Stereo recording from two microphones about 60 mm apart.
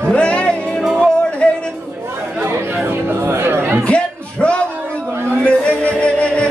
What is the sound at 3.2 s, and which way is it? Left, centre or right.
Music, right.